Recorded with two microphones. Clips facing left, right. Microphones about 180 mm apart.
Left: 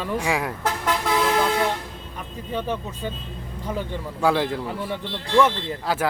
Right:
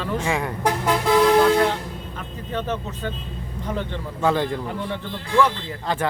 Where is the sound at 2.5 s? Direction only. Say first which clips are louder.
Even; 10° left (ahead or behind).